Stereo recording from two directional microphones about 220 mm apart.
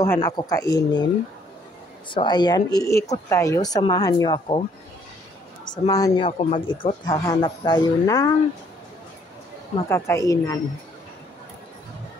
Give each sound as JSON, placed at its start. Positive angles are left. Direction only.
{"t": 0.0, "sound": "speech", "side_deg": 15}
{"t": 2.0, "sound": "speech", "side_deg": 20}
{"t": 5.9, "sound": "speech", "side_deg": 15}
{"t": 9.8, "sound": "speech", "side_deg": 10}